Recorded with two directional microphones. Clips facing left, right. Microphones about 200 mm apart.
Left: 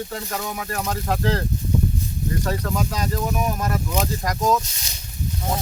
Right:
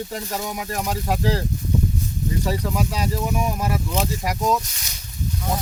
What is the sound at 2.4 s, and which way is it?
Speech, 10° right (ahead or behind).